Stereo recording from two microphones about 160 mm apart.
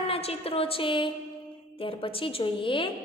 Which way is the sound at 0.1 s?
40° left (ahead or behind).